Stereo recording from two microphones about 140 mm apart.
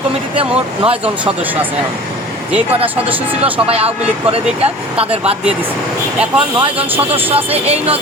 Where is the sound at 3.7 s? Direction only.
45° right (ahead or behind).